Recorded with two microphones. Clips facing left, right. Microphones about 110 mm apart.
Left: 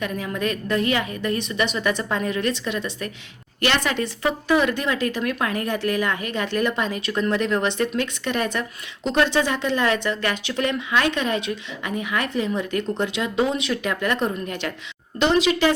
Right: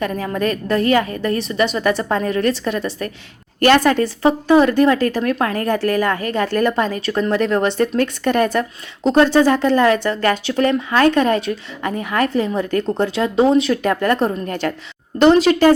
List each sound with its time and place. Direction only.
0.0 s a woman's voice: 40° right (ahead or behind)